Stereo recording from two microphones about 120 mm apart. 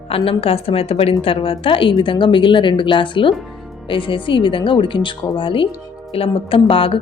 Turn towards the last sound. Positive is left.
turn(degrees=50)  # may be behind; listen again after turning